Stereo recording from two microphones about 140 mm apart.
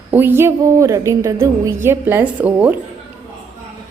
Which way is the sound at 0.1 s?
15° right (ahead or behind).